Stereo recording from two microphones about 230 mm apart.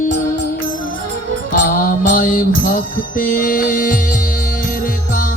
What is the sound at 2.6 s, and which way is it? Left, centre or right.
Music, left.